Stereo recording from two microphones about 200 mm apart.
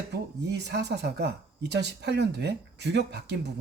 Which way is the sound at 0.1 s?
55° right (ahead or behind).